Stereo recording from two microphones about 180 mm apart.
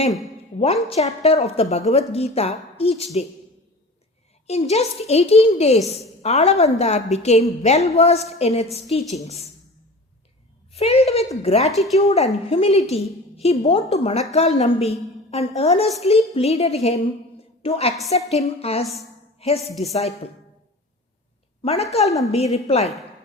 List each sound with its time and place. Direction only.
0.6 s a child's voice: 35° left (ahead or behind)
4.4 s a child's voice: 35° left (ahead or behind)
10.7 s a woman's voice: 35° left (ahead or behind)
21.6 s a woman's voice: 35° left (ahead or behind)